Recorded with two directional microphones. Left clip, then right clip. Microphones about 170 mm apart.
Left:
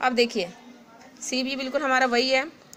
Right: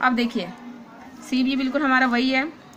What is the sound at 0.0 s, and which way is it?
A woman's voice, 40° left (ahead or behind).